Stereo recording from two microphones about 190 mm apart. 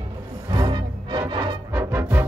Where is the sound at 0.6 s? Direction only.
20° right (ahead or behind).